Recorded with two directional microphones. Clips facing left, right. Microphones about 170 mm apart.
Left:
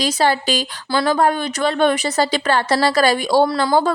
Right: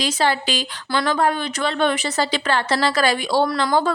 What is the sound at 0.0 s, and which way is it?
Speech, 40° left (ahead or behind).